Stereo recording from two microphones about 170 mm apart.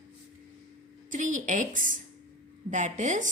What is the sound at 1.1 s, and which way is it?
A woman's voice, 50° right (ahead or behind).